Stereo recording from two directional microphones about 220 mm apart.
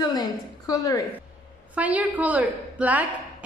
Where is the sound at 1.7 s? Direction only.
5° right (ahead or behind).